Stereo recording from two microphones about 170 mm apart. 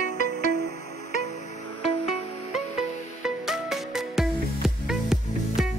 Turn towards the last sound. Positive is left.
turn(degrees=0)  # may be behind; listen again after turning